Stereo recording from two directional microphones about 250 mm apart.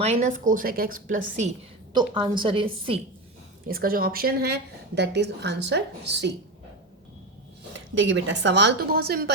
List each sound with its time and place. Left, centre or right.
0.0 s a woman's voice: right
1.9 s a woman's voice: centre
3.7 s a woman's voice: right
7.9 s a woman's voice: right